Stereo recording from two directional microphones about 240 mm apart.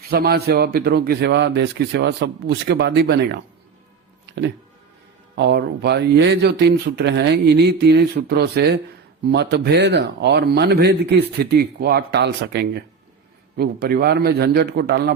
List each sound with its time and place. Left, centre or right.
0.1 s a man's voice: right